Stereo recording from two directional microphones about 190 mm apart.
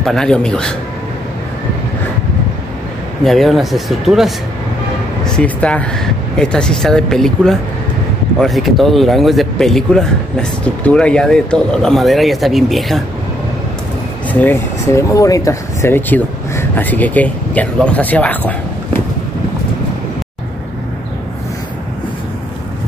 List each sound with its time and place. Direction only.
0.0 s speech: centre (ahead or behind)
3.3 s speech: centre (ahead or behind)
14.3 s speech: 10° left (ahead or behind)